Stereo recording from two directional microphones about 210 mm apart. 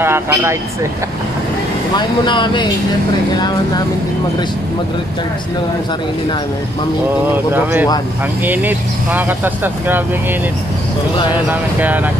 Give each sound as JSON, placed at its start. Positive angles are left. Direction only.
{"t": 0.0, "sound": "speech", "side_deg": -10}
{"t": 2.0, "sound": "speech", "side_deg": 20}
{"t": 7.5, "sound": "speech", "side_deg": -10}
{"t": 11.4, "sound": "speech", "side_deg": -10}